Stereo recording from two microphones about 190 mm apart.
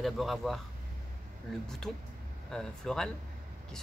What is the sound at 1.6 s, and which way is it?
Speech, 5° left (ahead or behind).